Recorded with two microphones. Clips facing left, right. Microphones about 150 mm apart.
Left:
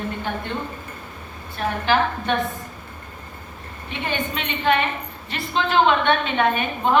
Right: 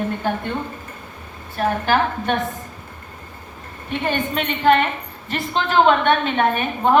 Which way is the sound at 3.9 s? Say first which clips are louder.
Right 4 dB; 50° right (ahead or behind).